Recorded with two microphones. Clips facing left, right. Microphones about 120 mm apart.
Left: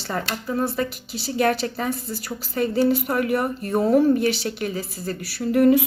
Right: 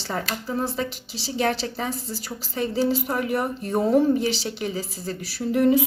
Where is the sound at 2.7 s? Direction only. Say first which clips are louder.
Left 3 dB; 60° left (ahead or behind).